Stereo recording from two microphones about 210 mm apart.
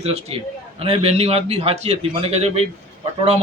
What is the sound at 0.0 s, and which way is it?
A man's voice, 30° right (ahead or behind).